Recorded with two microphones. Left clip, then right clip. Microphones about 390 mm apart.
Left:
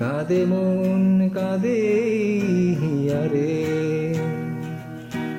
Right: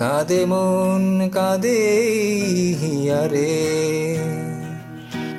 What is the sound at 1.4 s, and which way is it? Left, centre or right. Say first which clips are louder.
Music: right 6 dB; centre.